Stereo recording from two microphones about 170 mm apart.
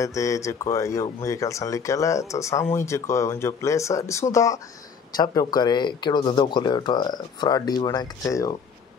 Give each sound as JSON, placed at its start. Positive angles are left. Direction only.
{"t": 0.0, "sound": "speech", "side_deg": 20}